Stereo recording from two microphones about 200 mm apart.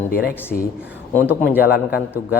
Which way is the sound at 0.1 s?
45° left (ahead or behind).